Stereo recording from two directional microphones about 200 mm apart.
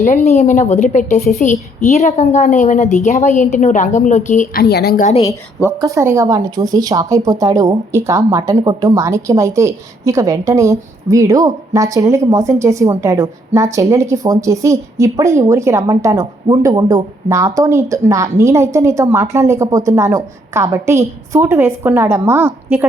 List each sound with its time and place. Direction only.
0.3 s a woman's voice: 35° left (ahead or behind); by 5.0 s 55° left (ahead or behind)
5.5 s a woman's voice: 15° right (ahead or behind)